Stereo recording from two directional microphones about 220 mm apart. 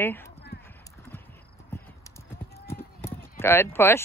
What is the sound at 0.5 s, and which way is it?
Clip-clop, 45° left (ahead or behind).